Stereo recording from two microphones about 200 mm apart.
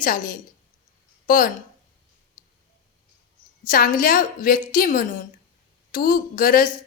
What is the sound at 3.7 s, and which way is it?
A woman's voice, 45° left (ahead or behind).